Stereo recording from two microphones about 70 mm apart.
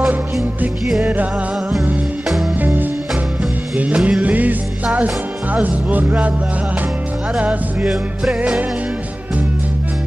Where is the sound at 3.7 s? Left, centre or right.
Centre.